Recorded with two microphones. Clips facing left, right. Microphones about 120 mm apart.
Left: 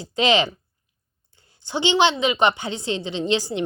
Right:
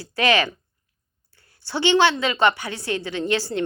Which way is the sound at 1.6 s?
15° left (ahead or behind).